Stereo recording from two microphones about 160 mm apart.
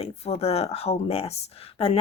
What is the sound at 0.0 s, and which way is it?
Speech, 40° left (ahead or behind).